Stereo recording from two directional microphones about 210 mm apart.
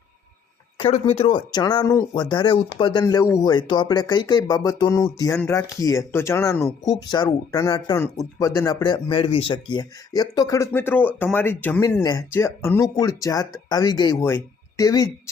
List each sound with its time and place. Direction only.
1.1 s speech: 25° left (ahead or behind)